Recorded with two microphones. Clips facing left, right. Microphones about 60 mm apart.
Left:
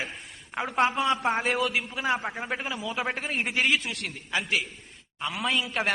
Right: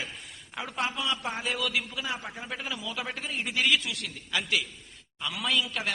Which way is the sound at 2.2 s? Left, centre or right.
Left.